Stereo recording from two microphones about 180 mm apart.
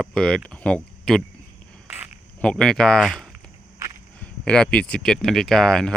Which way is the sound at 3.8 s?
15° right (ahead or behind).